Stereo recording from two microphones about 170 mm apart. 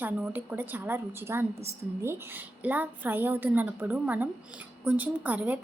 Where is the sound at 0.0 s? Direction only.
10° right (ahead or behind).